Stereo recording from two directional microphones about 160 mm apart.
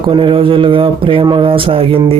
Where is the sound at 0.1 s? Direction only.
35° right (ahead or behind).